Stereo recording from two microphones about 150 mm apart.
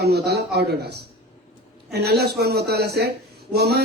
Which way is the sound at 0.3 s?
90° right.